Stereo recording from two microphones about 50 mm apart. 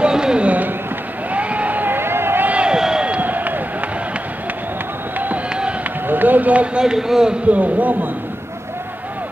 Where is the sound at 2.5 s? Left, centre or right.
Right.